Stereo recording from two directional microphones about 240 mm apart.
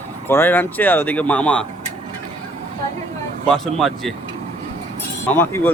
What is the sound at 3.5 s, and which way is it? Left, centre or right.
Speech, centre.